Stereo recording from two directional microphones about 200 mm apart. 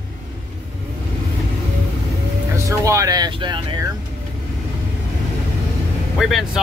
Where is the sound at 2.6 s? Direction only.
15° right (ahead or behind).